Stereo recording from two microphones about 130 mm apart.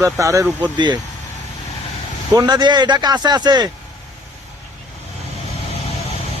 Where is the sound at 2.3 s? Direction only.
30° right (ahead or behind).